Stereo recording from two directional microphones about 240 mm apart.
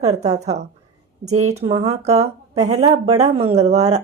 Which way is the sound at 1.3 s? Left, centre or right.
Right.